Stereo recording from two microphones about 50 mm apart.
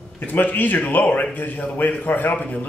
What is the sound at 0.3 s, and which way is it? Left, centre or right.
A man's voice, left.